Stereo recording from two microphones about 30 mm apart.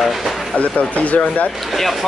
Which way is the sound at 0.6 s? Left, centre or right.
Left.